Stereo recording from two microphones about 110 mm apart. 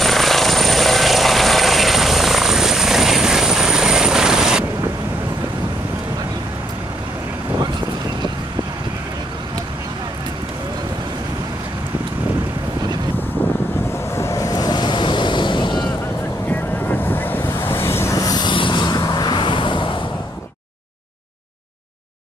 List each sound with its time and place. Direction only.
0.0 s helicopter: centre (ahead or behind)
14.1 s waves: 25° left (ahead or behind); by 15.8 s 45° left (ahead or behind)
17.0 s vehicle: 15° left (ahead or behind); by 20.0 s 50° left (ahead or behind)